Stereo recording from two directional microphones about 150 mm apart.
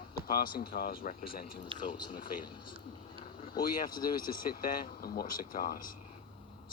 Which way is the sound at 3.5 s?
70° left (ahead or behind).